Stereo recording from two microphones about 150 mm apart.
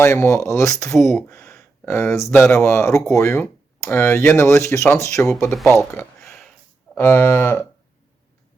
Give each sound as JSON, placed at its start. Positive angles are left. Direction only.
{"t": 0.0, "sound": "speech", "side_deg": 20}
{"t": 0.9, "sound": "speech", "side_deg": 0}
{"t": 1.3, "sound": "speech", "side_deg": 15}
{"t": 5.9, "sound": "a sound", "side_deg": 15}
{"t": 6.9, "sound": "cattle", "side_deg": 15}